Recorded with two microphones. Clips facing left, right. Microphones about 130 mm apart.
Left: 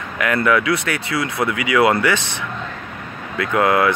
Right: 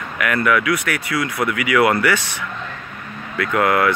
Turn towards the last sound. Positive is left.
turn(degrees=25)  # may be behind; listen again after turning